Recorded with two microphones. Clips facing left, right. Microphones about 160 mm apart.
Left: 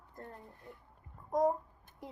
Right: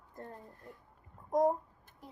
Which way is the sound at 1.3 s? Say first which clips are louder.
Right 1 dB; 20° right (ahead or behind).